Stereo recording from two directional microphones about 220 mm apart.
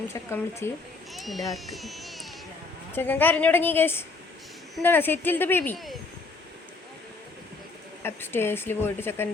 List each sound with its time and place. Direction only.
0.1 s speech: 10° left (ahead or behind)
1.1 s speech: centre (ahead or behind)
8.0 s speech: 10° left (ahead or behind)